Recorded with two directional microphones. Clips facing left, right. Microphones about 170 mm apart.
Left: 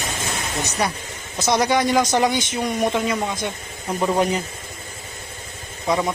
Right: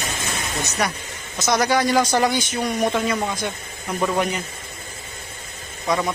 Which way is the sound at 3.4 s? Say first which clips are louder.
Even; 20° left (ahead or behind).